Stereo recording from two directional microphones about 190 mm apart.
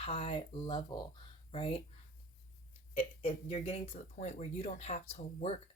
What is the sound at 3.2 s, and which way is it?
Speech, 35° left (ahead or behind).